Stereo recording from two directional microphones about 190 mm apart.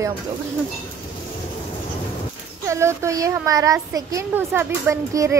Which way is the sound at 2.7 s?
15° right (ahead or behind).